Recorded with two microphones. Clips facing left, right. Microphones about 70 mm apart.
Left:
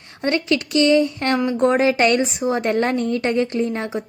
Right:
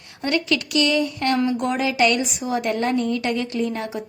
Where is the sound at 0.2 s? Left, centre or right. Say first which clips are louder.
Left 2 dB; left.